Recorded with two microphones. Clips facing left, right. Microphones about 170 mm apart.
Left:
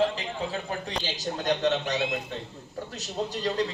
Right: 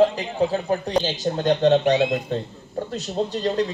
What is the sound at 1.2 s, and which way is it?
Speech, 30° right (ahead or behind).